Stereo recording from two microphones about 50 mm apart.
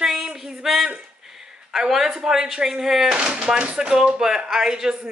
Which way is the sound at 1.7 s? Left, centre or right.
Centre.